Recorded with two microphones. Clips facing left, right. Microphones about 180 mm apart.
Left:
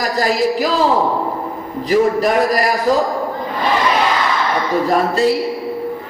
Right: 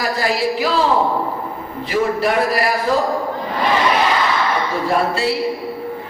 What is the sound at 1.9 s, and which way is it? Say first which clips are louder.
A woman's voice: left 4 dB; 40° left (ahead or behind).